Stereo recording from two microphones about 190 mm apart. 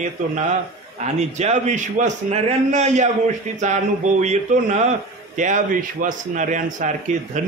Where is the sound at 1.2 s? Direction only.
35° right (ahead or behind).